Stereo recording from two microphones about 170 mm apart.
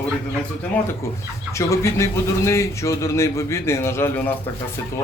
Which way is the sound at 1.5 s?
15° left (ahead or behind).